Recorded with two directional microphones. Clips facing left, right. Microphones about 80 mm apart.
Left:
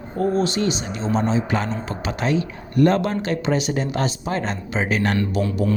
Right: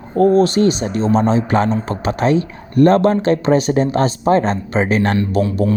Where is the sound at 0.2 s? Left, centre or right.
Right.